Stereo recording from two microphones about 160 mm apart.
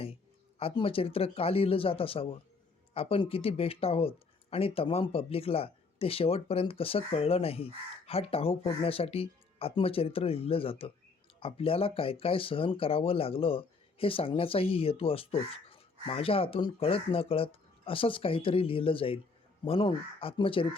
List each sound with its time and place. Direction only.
0.6 s speech: 35° left (ahead or behind)